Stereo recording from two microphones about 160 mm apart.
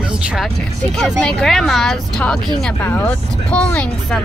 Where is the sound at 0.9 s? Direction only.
5° left (ahead or behind).